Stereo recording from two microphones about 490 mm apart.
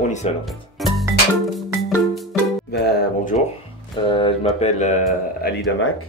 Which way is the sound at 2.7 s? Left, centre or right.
Centre.